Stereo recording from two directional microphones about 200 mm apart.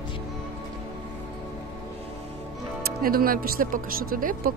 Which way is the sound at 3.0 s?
45° right (ahead or behind).